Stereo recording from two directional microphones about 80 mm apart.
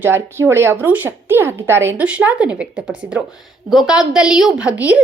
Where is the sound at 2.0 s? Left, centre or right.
Centre.